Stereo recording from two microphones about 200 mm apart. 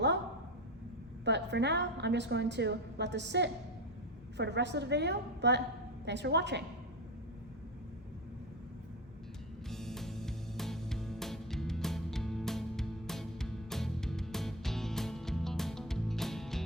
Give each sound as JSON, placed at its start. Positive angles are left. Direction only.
{"t": 1.2, "sound": "a woman's voice", "side_deg": -60}
{"t": 9.6, "sound": "music", "side_deg": 0}